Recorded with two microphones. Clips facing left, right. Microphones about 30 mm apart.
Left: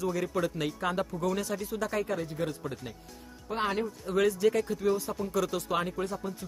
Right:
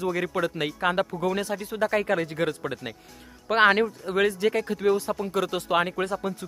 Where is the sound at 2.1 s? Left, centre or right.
Right.